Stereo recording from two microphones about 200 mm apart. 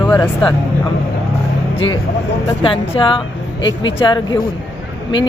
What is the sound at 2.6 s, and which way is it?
Speech, 25° left (ahead or behind).